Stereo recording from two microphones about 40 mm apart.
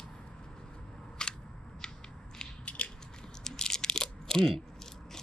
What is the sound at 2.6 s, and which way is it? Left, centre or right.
Mechanisms, left.